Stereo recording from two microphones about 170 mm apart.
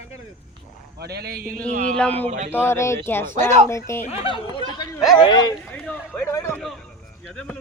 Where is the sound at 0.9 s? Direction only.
70° right (ahead or behind).